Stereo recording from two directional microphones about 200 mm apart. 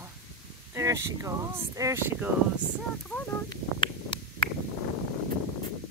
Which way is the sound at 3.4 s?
25° left (ahead or behind).